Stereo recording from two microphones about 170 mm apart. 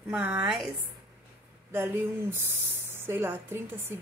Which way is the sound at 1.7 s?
15° right (ahead or behind).